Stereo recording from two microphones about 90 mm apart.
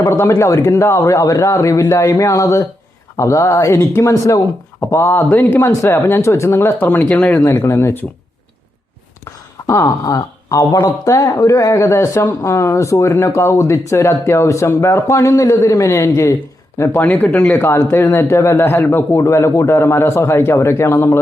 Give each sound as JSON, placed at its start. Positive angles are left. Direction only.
{"t": 0.0, "sound": "a man's voice", "side_deg": 30}
{"t": 7.1, "sound": "speech", "side_deg": 10}
{"t": 7.6, "sound": "speech", "side_deg": 30}
{"t": 9.6, "sound": "a man's voice", "side_deg": 35}
{"t": 17.7, "sound": "a man's voice", "side_deg": 35}